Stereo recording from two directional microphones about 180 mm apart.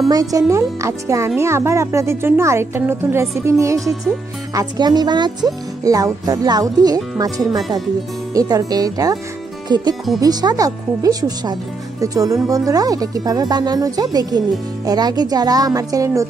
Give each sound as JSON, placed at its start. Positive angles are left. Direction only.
{"t": 0.1, "sound": "speech", "side_deg": -20}